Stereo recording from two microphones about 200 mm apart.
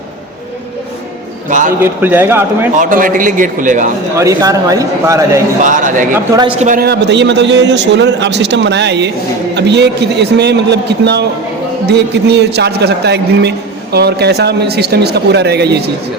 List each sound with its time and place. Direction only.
1.5 s a man's voice: 40° right (ahead or behind)
1.8 s speech: 10° right (ahead or behind)
2.7 s a man's voice: 40° right (ahead or behind)
4.2 s speech: 15° right (ahead or behind)
5.6 s a man's voice: 40° right (ahead or behind)